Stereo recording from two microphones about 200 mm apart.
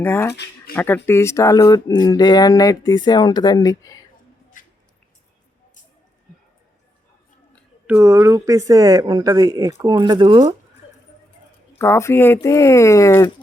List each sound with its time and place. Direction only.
0.0 s speech: 10° left (ahead or behind)
4.6 s squish: 40° left (ahead or behind)
7.9 s speech: 15° right (ahead or behind)
11.8 s speech: 15° left (ahead or behind)